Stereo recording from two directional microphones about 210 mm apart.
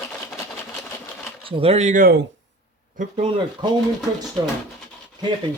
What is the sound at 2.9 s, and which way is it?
Speech, 35° right (ahead or behind).